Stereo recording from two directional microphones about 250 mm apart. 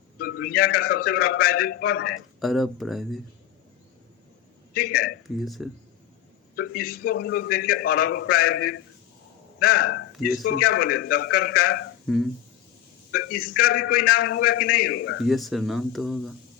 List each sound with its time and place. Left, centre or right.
0.2 s a man's voice: left
2.4 s speech: centre
4.7 s a man's voice: left
5.4 s speech: centre
6.6 s a man's voice: left
12.0 s speech: centre
13.6 s a man's voice: left
15.3 s speech: centre